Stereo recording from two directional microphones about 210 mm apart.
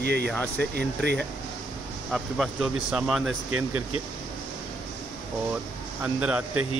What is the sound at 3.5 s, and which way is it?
Speech, 90° right.